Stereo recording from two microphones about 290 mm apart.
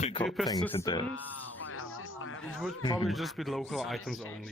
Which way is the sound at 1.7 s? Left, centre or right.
Left.